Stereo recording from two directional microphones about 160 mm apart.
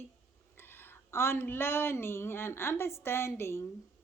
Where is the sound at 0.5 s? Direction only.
15° left (ahead or behind).